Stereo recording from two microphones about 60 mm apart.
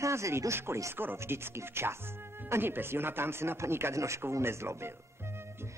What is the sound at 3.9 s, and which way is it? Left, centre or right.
Speech, right.